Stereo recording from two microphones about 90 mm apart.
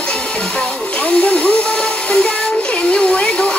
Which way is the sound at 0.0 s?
10° left (ahead or behind).